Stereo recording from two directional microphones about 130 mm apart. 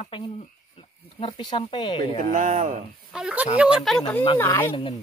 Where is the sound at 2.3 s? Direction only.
70° right (ahead or behind).